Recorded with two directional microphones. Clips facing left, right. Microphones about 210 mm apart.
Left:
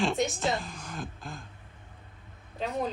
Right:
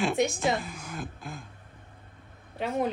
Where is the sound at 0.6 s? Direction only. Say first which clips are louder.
Right 1 dB; 5° right (ahead or behind).